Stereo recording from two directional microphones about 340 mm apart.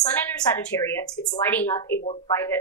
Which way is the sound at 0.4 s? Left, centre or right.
Centre.